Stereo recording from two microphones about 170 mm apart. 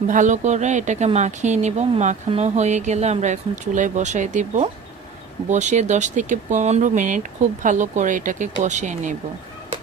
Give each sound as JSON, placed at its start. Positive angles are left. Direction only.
{"t": 0.1, "sound": "speech", "side_deg": -45}